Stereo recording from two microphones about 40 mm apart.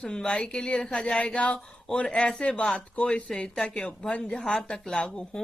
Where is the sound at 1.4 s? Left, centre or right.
Left.